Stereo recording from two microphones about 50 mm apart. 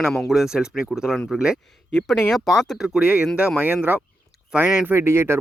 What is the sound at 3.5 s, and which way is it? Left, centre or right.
Speech, right.